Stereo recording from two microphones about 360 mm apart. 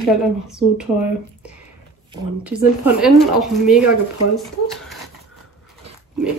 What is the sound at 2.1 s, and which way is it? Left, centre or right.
Speech, centre.